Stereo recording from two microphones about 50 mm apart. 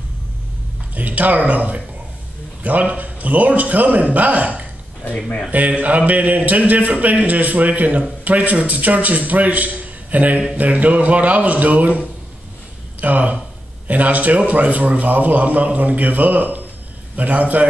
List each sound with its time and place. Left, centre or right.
0.9 s a man's voice: right
5.0 s speech: left
5.5 s a man's voice: right
13.0 s a man's voice: right